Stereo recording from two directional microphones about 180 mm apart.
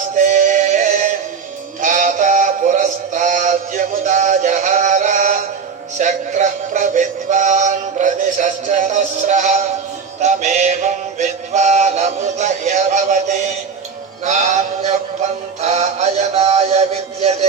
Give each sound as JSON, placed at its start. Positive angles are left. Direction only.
{"t": 0.2, "sound": "music", "side_deg": -45}
{"t": 1.8, "sound": "synthetic singing", "side_deg": -45}
{"t": 6.0, "sound": "music", "side_deg": -45}